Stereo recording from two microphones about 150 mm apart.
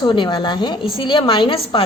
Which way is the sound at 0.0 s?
30° left (ahead or behind).